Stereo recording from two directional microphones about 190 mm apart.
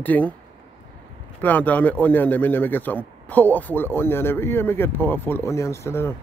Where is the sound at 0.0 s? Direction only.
10° left (ahead or behind).